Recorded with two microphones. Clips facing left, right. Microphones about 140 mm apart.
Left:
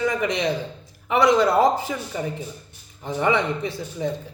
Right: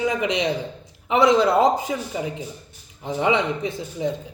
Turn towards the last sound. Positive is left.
turn(degrees=-20)  # may be behind; listen again after turning